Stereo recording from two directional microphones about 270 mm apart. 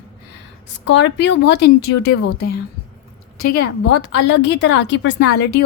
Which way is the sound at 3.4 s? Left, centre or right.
Left.